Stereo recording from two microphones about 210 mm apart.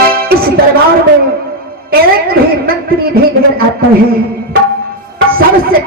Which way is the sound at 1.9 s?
45° right (ahead or behind).